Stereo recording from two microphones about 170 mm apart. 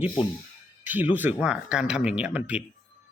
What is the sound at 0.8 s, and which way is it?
A man's voice, 10° right (ahead or behind).